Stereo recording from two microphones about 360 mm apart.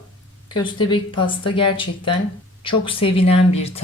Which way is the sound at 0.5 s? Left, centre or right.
Centre.